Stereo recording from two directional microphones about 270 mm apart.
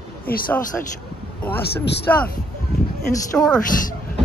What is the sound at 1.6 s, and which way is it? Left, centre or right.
Speech, left.